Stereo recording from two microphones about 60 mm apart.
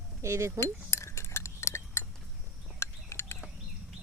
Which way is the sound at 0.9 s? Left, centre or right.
Left.